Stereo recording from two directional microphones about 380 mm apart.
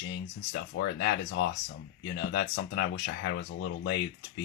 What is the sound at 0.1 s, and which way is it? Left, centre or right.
Speech, left.